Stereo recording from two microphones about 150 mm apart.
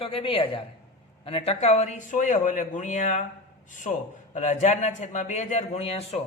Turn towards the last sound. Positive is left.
turn(degrees=45)  # may be behind; listen again after turning